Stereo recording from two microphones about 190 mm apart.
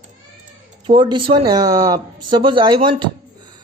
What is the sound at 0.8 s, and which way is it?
Speech, 25° right (ahead or behind).